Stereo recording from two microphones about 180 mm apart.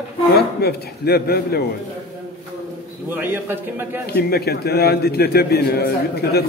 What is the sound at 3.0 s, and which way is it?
Speech, 10° right (ahead or behind).